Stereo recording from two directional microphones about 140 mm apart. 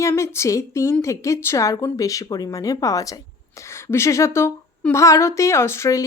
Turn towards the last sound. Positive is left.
turn(degrees=20)  # may be behind; listen again after turning